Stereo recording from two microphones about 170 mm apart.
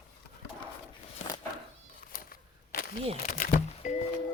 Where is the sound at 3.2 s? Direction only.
50° left (ahead or behind).